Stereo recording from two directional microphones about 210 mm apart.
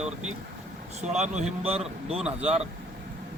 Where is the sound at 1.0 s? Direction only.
30° right (ahead or behind).